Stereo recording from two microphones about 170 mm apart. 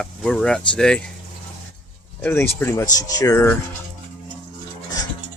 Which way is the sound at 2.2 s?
10° left (ahead or behind).